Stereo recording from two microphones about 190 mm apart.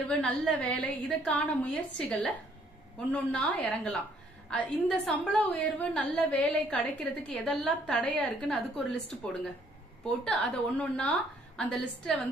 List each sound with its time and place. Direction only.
0.0 s a woman's voice: 5° left (ahead or behind)